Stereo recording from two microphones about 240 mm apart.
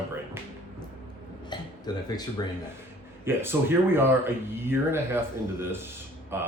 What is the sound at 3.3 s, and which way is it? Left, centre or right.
Speech, centre.